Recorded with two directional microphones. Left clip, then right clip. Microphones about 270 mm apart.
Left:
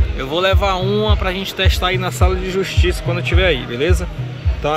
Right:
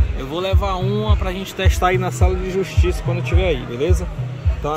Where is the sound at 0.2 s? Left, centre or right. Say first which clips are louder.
Left 6 dB; centre.